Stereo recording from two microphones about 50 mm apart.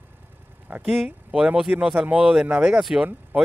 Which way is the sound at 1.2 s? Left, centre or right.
Centre.